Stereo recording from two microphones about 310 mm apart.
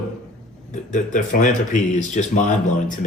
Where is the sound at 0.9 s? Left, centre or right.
Left.